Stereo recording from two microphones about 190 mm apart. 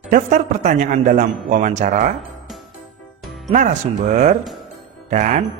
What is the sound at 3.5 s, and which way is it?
A man's voice, 40° right (ahead or behind).